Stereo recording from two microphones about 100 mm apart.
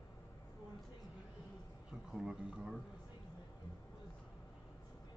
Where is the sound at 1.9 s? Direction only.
5° right (ahead or behind).